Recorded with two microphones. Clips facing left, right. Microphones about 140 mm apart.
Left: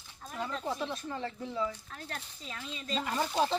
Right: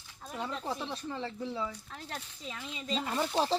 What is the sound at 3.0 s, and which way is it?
Speech, 30° right (ahead or behind).